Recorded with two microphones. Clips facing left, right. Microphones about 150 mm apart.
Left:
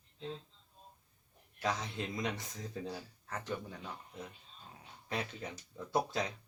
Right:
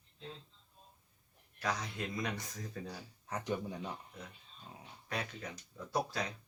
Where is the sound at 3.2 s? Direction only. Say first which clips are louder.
Right 3 dB; 15° right (ahead or behind).